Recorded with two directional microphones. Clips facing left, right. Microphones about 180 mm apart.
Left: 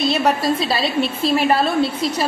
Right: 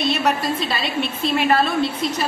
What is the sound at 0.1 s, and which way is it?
A woman's voice, 35° left (ahead or behind).